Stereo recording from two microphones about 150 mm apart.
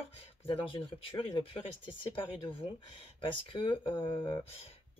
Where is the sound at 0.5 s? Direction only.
35° left (ahead or behind).